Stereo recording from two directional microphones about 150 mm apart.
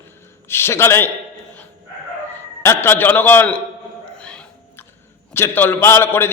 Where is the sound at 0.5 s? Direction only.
15° left (ahead or behind).